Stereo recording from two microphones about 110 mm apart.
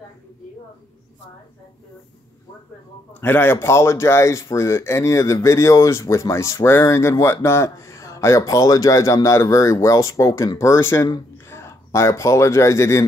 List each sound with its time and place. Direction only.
3.2 s speech: 20° left (ahead or behind)